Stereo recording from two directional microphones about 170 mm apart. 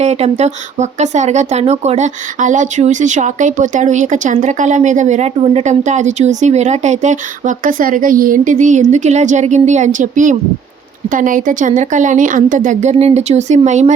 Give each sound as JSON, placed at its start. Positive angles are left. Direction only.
{"t": 0.0, "sound": "speech", "side_deg": -40}